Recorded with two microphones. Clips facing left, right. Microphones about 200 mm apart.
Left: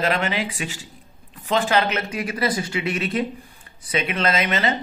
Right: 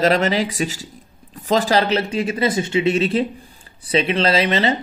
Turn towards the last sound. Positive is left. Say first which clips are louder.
# right 4 dB
turn(degrees=-30)  # may be behind; listen again after turning